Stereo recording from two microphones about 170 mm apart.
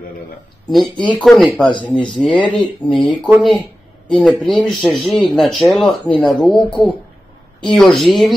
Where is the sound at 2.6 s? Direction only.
30° left (ahead or behind).